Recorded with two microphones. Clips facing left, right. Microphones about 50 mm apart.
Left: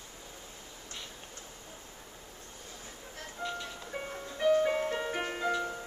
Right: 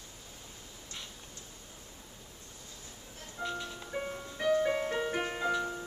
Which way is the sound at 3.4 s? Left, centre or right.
Centre.